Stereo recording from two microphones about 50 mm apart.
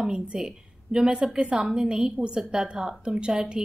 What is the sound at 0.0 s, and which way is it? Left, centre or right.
A woman's voice, centre.